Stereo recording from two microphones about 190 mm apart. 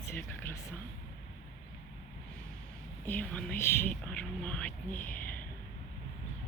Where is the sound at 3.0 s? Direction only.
10° left (ahead or behind).